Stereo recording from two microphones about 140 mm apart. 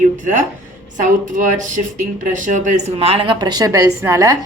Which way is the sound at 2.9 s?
45° right (ahead or behind).